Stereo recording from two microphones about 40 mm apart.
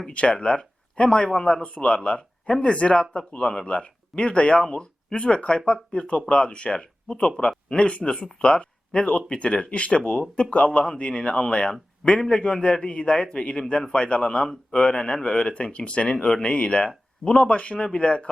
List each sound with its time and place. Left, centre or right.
0.1 s a man's voice: left